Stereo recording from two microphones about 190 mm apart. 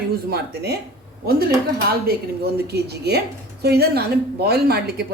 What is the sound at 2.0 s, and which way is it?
A woman's voice, 55° right (ahead or behind).